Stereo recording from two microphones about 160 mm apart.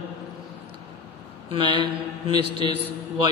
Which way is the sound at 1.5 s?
30° right (ahead or behind).